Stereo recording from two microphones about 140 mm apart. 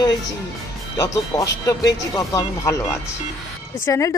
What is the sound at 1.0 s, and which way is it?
A woman's voice, 25° left (ahead or behind).